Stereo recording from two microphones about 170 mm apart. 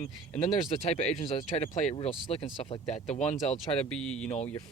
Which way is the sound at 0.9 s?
40° left (ahead or behind).